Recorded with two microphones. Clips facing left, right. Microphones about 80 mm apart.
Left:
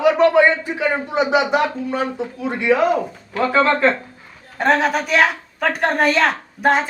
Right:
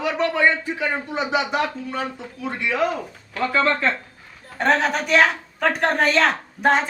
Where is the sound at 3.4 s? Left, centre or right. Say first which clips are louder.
Left 5 dB; left.